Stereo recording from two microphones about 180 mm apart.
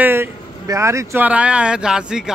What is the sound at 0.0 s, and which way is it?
Speech, 10° right (ahead or behind).